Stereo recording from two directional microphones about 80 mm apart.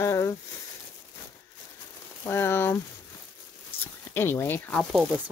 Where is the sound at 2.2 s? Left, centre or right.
Left.